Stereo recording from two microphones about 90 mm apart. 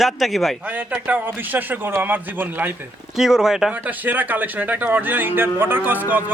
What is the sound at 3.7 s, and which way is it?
Speech, 20° right (ahead or behind).